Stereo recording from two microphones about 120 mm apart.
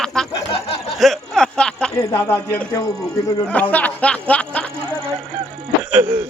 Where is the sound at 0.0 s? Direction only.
5° left (ahead or behind).